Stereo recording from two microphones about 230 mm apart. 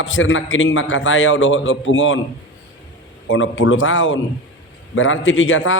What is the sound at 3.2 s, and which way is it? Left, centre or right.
A man's voice, left.